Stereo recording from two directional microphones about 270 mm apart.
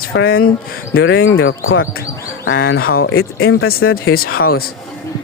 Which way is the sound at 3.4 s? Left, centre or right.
Left.